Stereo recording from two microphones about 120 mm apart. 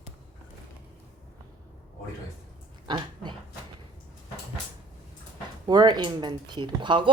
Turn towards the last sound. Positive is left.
turn(degrees=-40)  # may be behind; listen again after turning